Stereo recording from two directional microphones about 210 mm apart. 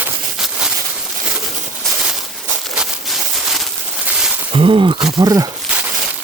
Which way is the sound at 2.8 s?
Centre (ahead or behind).